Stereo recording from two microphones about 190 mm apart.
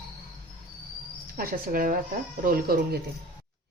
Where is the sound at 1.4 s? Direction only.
50° right (ahead or behind).